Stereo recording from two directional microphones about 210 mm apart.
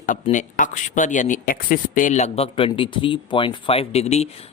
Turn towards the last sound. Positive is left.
turn(degrees=30)  # may be behind; listen again after turning